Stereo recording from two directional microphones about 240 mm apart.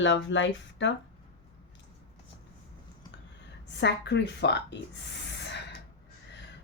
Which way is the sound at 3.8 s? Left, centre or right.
Left.